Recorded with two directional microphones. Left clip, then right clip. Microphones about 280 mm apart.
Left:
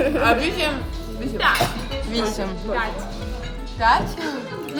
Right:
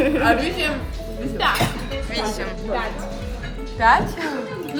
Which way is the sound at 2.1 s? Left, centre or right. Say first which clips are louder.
Left 1 dB; left.